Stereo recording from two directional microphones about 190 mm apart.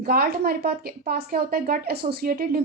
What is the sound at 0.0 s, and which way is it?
A woman's voice, 50° right (ahead or behind).